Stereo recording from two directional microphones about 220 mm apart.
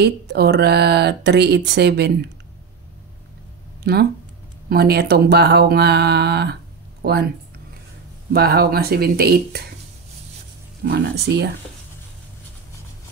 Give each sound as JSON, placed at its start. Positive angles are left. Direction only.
{"t": 0.0, "sound": "speech", "side_deg": -50}
{"t": 3.8, "sound": "speech", "side_deg": -45}
{"t": 8.3, "sound": "speech", "side_deg": -45}
{"t": 10.8, "sound": "speech", "side_deg": -50}